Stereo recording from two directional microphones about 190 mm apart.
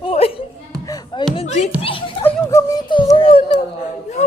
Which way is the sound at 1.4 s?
35° left (ahead or behind).